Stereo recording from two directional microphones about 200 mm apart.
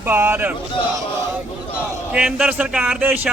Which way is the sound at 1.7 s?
5° right (ahead or behind).